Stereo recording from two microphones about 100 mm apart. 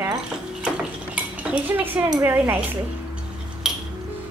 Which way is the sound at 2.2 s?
20° right (ahead or behind).